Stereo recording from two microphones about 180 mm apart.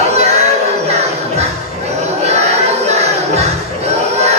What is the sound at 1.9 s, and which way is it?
Music, 35° right (ahead or behind).